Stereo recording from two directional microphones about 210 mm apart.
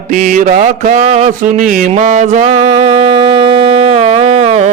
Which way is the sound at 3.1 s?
25° right (ahead or behind).